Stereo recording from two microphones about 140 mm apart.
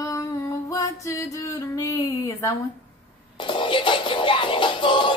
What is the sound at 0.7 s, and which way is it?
Music, 20° left (ahead or behind).